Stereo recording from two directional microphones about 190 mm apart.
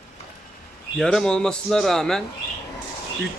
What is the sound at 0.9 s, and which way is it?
A man's voice, 5° left (ahead or behind).